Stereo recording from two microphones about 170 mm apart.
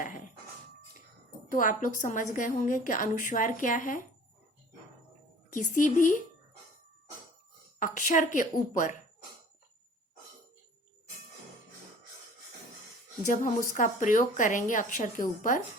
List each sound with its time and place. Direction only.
1.5 s a woman's voice: 50° left (ahead or behind)
5.5 s a woman's voice: 50° left (ahead or behind)
7.8 s a woman's voice: 50° left (ahead or behind)
13.2 s a woman's voice: 50° left (ahead or behind)